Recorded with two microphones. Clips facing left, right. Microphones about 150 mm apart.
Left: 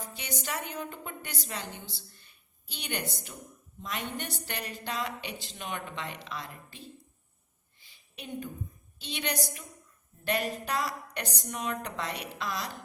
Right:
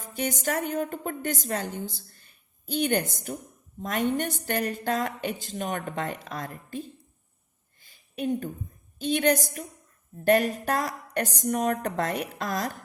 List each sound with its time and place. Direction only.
0.1 s a woman's voice: 50° right (ahead or behind)
7.8 s a sound: 50° right (ahead or behind)
9.0 s a woman's voice: 50° right (ahead or behind)